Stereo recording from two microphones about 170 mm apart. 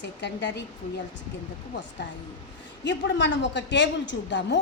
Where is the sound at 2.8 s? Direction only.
90° left.